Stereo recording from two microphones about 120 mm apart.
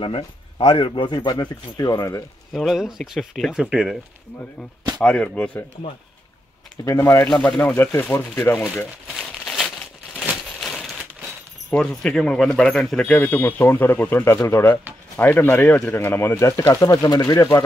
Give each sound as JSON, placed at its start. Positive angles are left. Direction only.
{"t": 0.6, "sound": "speech", "side_deg": 55}
{"t": 2.5, "sound": "speech", "side_deg": 0}
{"t": 5.0, "sound": "speech", "side_deg": 10}
{"t": 6.8, "sound": "speech", "side_deg": 25}
{"t": 7.2, "sound": "speech", "side_deg": 10}
{"t": 9.0, "sound": "crumpling", "side_deg": 0}
{"t": 11.7, "sound": "speech", "side_deg": 5}